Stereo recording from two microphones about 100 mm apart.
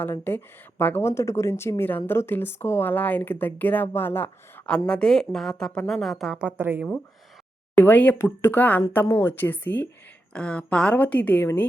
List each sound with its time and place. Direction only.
0.0 s a woman's voice: 25° left (ahead or behind); by 6.4 s centre (ahead or behind)
6.4 s a woman's voice: 20° right (ahead or behind)
7.8 s a woman's voice: 15° left (ahead or behind)